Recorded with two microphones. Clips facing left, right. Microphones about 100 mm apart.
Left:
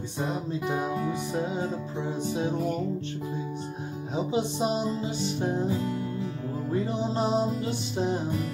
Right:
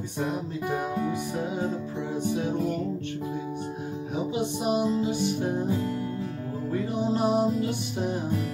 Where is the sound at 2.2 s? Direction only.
25° left (ahead or behind).